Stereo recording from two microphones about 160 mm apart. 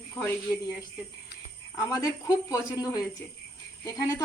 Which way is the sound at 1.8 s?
20° left (ahead or behind).